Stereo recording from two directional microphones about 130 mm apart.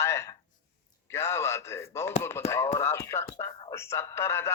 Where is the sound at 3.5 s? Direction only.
35° left (ahead or behind).